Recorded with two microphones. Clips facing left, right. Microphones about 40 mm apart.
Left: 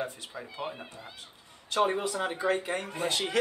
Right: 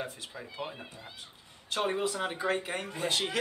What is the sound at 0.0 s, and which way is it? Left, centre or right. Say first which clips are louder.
A man's voice: left 3 dB; centre.